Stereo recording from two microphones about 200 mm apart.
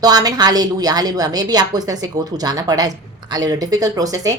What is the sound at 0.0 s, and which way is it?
Speech, 20° right (ahead or behind).